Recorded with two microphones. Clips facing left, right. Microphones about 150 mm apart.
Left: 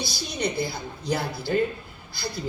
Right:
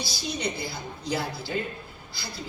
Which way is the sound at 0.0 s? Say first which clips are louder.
Left 2 dB; 50° left (ahead or behind).